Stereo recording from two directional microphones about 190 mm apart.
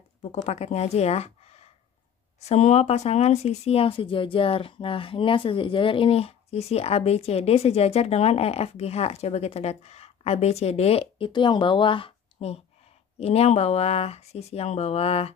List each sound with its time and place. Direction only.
0.2 s speech: 35° left (ahead or behind)